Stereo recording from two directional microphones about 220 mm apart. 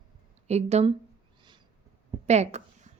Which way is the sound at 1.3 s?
20° right (ahead or behind).